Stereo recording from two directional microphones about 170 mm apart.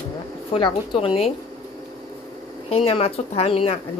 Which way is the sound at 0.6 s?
30° left (ahead or behind).